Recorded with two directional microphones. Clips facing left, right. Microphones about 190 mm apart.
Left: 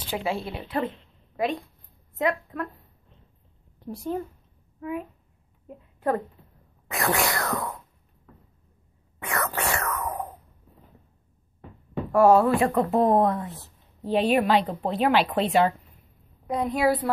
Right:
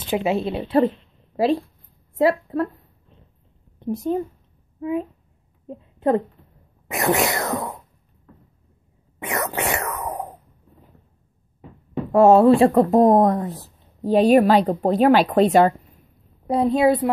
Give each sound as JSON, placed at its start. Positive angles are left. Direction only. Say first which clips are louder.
{"t": 0.1, "sound": "speech", "louder": "right 8 dB", "side_deg": -20}
{"t": 3.8, "sound": "a woman's voice", "louder": "right 7 dB", "side_deg": -20}
{"t": 9.2, "sound": "a sound", "louder": "right 4 dB", "side_deg": -20}
{"t": 11.9, "sound": "speech", "louder": "right 4 dB", "side_deg": -25}
{"t": 16.4, "sound": "speech", "louder": "right 6 dB", "side_deg": -30}